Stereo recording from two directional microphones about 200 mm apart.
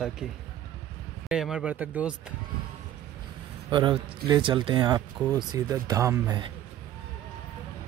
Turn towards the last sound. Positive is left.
turn(degrees=-15)  # may be behind; listen again after turning